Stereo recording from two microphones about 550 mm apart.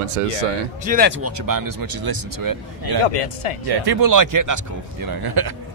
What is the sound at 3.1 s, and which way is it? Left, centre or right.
Speech, left.